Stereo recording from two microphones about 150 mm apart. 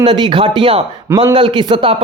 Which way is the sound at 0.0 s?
35° right (ahead or behind).